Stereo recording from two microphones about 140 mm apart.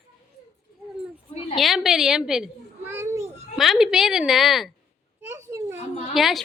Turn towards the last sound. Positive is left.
turn(degrees=0)  # may be behind; listen again after turning